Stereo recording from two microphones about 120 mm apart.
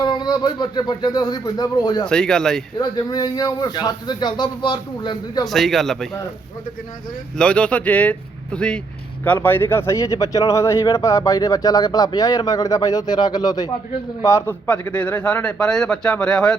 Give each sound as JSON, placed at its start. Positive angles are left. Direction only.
{"t": 0.0, "sound": "speech", "side_deg": 35}
{"t": 2.0, "sound": "speech", "side_deg": 5}
{"t": 2.7, "sound": "speech", "side_deg": 35}
{"t": 5.5, "sound": "speech", "side_deg": 0}
{"t": 7.3, "sound": "speech", "side_deg": 10}
{"t": 14.7, "sound": "speech", "side_deg": 10}